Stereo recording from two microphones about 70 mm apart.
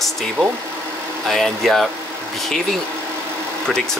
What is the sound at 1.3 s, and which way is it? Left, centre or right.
Speech, centre.